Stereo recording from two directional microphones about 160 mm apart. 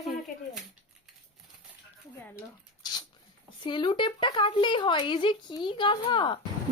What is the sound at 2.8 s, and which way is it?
Dog, 25° left (ahead or behind).